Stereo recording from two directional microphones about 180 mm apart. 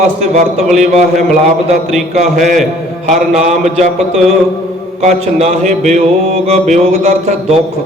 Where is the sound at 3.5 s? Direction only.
40° right (ahead or behind).